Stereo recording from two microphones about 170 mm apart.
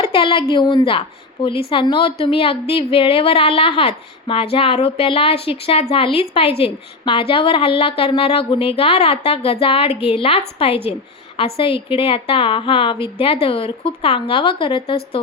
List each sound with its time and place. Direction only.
0.0 s a woman's voice: 30° left (ahead or behind)